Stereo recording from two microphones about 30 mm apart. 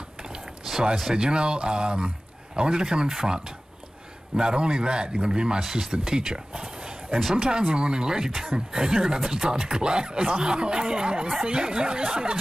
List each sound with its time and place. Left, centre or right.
0.7 s a sound: centre
1.1 s a man's voice: right
5.7 s speech: centre